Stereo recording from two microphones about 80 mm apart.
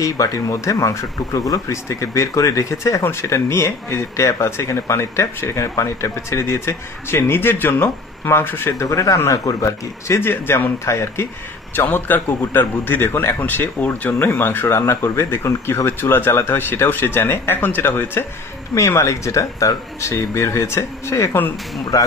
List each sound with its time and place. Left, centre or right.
0.0 s speech: left
9.3 s speech: left
18.8 s speech: left
21.9 s speech: left